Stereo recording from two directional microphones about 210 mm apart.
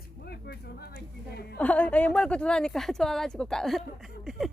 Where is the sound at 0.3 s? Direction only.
50° left (ahead or behind).